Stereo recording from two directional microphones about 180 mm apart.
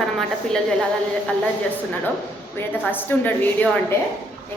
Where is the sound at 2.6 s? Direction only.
10° left (ahead or behind).